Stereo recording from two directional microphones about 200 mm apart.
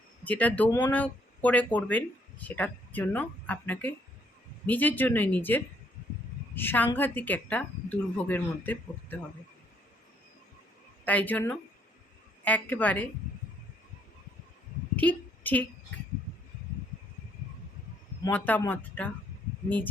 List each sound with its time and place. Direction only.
0.3 s speech: 5° left (ahead or behind)
11.0 s speech: 10° left (ahead or behind)
14.9 s a woman's voice: 10° left (ahead or behind)
18.2 s speech: 10° left (ahead or behind)